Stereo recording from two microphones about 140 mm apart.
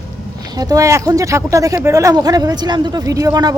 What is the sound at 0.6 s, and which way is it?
Speech, 25° right (ahead or behind).